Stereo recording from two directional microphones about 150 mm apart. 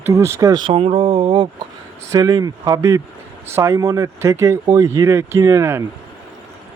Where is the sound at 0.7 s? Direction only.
40° right (ahead or behind).